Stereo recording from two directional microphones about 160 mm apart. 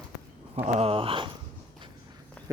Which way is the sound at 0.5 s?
40° right (ahead or behind).